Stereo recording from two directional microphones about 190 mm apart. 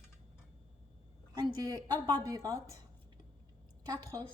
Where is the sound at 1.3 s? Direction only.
20° right (ahead or behind).